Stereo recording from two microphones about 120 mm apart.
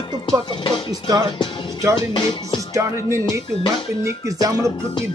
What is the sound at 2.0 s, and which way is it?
Music, 40° left (ahead or behind).